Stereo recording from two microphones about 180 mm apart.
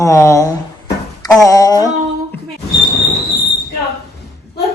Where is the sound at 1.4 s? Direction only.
20° left (ahead or behind).